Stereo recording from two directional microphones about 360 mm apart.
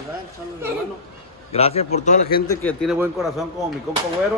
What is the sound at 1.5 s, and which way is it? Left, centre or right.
Speech, centre.